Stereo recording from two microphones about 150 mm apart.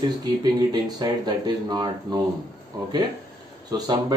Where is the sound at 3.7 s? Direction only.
25° right (ahead or behind).